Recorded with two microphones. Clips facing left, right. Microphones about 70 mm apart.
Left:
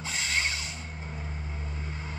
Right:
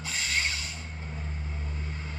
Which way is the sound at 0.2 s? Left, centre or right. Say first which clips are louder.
Even; left.